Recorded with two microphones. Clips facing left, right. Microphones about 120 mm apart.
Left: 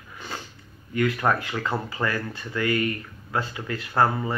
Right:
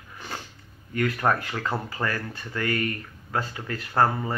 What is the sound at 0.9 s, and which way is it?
Speech, 40° right (ahead or behind).